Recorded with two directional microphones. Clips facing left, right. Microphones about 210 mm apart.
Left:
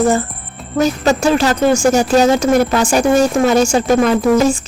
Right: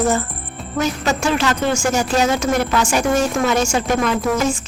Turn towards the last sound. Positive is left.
turn(degrees=35)  # may be behind; listen again after turning